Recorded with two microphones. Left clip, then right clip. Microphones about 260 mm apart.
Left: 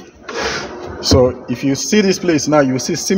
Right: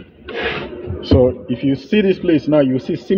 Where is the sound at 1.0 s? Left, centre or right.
Left.